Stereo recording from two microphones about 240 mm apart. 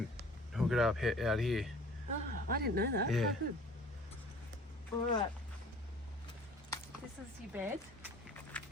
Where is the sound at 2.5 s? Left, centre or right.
Right.